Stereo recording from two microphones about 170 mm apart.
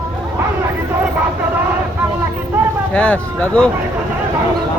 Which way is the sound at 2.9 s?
5° left (ahead or behind).